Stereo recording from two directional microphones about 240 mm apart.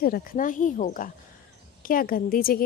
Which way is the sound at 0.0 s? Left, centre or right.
Left.